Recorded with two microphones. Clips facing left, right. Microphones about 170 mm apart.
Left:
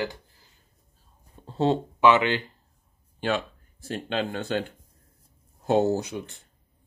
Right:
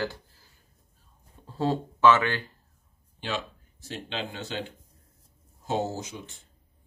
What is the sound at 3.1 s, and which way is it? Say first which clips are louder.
Speech: left 6 dB; 55° left (ahead or behind).